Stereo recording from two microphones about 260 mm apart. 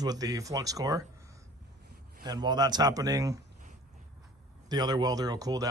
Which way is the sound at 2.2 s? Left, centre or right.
Centre.